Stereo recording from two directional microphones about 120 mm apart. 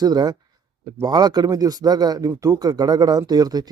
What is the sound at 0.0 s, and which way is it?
Speech, 35° right (ahead or behind).